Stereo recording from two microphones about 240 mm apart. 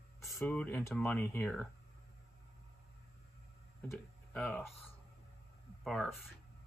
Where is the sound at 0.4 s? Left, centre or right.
Centre.